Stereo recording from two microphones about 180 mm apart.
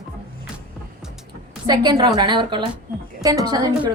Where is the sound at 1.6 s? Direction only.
25° right (ahead or behind).